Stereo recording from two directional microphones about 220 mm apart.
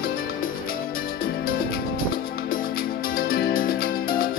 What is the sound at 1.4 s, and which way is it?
Music, 40° left (ahead or behind).